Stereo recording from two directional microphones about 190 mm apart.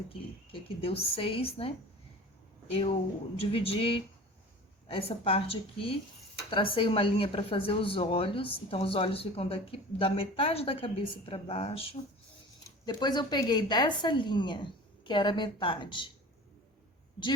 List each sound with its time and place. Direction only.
0.1 s speech: 30° left (ahead or behind)
3.3 s speech: 30° left (ahead or behind)